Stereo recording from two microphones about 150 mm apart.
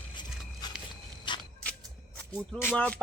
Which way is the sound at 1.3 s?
30° left (ahead or behind).